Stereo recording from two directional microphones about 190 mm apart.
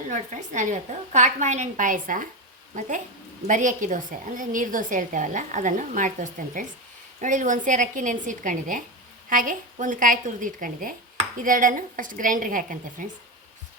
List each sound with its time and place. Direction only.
0.1 s a woman's voice: 40° right (ahead or behind)